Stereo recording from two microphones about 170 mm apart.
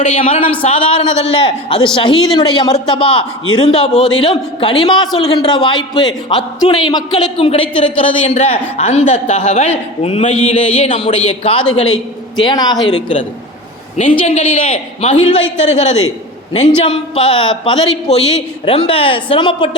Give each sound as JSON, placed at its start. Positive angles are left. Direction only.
{"t": 0.3, "sound": "a man's voice", "side_deg": 35}
{"t": 12.4, "sound": "a man's voice", "side_deg": 25}
{"t": 13.9, "sound": "a man's voice", "side_deg": 45}